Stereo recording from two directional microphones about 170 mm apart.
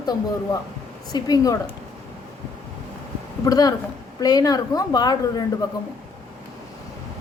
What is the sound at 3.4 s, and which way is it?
A woman's voice, 20° left (ahead or behind).